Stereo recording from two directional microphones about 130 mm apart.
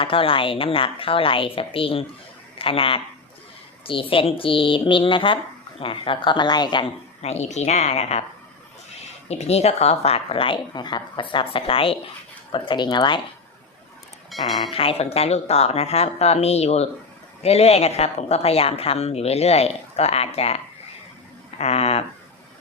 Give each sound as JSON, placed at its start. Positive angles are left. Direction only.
{"t": 0.0, "sound": "speech", "side_deg": 45}
{"t": 4.1, "sound": "a woman's voice", "side_deg": 45}
{"t": 7.2, "sound": "a woman's voice", "side_deg": 55}
{"t": 9.3, "sound": "a woman's voice", "side_deg": 55}
{"t": 14.3, "sound": "speech", "side_deg": 0}
{"t": 14.7, "sound": "speech", "side_deg": 50}
{"t": 21.6, "sound": "a sound", "side_deg": 55}